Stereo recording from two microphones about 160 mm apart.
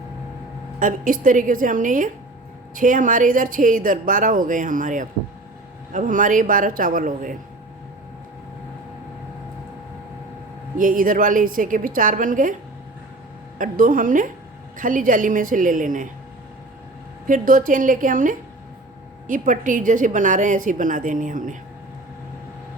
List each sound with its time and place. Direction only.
0.8 s speech: 55° right (ahead or behind)
10.8 s speech: 60° right (ahead or behind)
13.6 s speech: 60° right (ahead or behind)
17.2 s a woman's voice: 60° right (ahead or behind)